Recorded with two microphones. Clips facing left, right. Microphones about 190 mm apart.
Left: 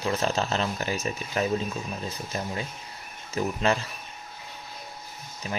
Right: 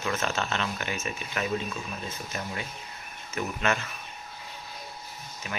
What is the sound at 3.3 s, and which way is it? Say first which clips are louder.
Speech: left 3 dB; 35° left (ahead or behind).